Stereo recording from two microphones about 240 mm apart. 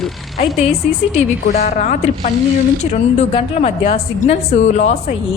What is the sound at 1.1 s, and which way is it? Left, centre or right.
A woman's voice, left.